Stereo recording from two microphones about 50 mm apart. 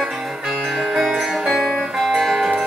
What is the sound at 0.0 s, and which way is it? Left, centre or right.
Music, centre.